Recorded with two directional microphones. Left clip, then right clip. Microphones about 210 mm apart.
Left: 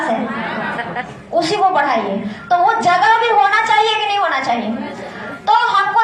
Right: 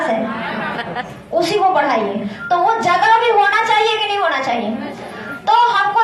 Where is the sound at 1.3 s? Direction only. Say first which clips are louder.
Even; 30° right (ahead or behind).